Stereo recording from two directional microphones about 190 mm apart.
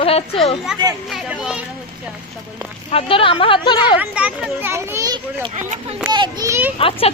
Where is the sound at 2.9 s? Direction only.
30° left (ahead or behind).